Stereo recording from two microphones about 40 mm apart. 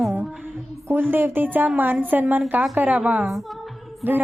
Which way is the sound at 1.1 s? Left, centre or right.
Right.